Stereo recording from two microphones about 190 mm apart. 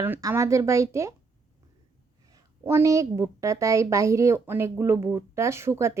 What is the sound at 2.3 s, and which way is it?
A woman's voice, 15° right (ahead or behind).